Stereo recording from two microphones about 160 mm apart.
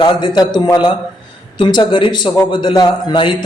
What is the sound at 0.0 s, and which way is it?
A man's voice, 30° left (ahead or behind).